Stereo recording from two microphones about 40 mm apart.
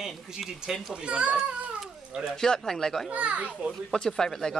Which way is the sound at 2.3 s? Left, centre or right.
Centre.